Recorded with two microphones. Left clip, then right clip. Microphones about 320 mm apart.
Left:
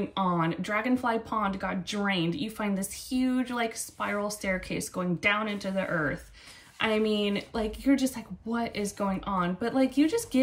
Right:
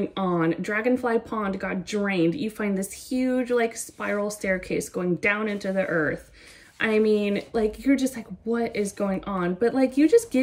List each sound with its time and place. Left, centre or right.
0.1 s speech: centre
6.8 s speech: left
7.2 s speech: centre